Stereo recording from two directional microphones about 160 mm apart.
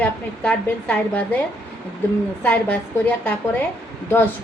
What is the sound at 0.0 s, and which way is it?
A woman's voice, 10° left (ahead or behind).